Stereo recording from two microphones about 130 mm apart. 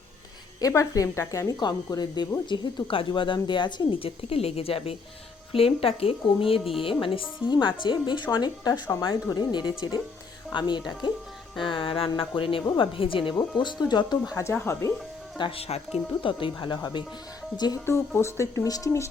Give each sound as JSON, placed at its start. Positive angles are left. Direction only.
{"t": 0.6, "sound": "speech", "side_deg": 25}
{"t": 14.3, "sound": "speech", "side_deg": 20}
{"t": 15.4, "sound": "speech", "side_deg": 45}
{"t": 17.8, "sound": "speech", "side_deg": 20}